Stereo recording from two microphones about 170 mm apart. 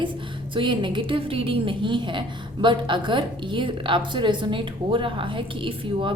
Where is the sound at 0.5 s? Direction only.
30° right (ahead or behind).